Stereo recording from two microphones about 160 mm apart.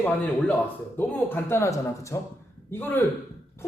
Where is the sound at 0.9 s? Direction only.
10° left (ahead or behind).